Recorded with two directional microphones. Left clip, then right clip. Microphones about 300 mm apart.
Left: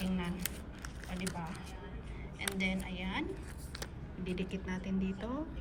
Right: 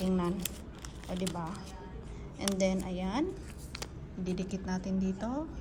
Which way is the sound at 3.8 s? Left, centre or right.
Centre.